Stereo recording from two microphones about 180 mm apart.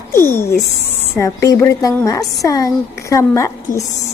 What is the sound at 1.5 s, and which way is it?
A woman's voice, 15° left (ahead or behind).